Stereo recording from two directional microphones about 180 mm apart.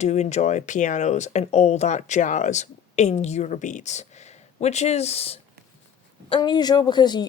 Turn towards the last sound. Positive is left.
turn(degrees=25)  # may be behind; listen again after turning